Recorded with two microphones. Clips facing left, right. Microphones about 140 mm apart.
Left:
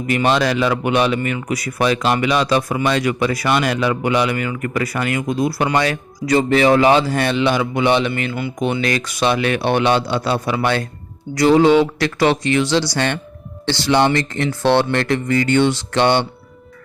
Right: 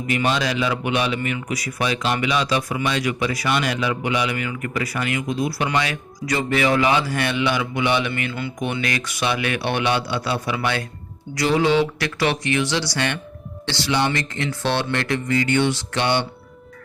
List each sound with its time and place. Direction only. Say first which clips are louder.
0.1 s a man's voice: left 5 dB; 45° left (ahead or behind); by 8.8 s 20° left (ahead or behind)
9.5 s speech: left 6 dB; 45° left (ahead or behind)